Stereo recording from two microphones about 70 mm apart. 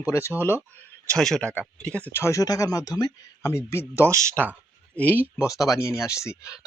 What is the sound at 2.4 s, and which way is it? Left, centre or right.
Speech, left.